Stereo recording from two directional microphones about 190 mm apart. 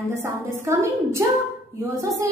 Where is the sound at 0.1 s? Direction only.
15° right (ahead or behind).